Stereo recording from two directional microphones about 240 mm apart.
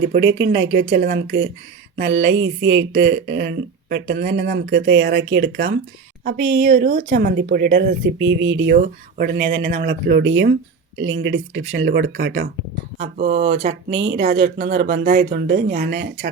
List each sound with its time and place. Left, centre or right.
0.1 s speech: right
13.0 s speech: right
14.0 s speech: right
14.3 s speech: right